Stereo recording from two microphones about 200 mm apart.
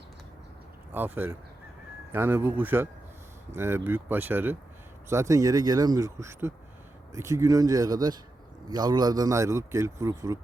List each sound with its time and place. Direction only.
0.9 s a man's voice: 10° right (ahead or behind)